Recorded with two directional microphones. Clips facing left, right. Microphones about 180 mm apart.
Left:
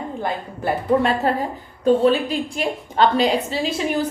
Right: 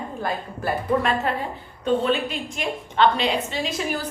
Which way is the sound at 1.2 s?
40° left (ahead or behind).